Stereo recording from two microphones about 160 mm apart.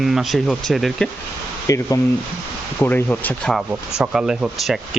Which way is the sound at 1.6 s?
20° left (ahead or behind).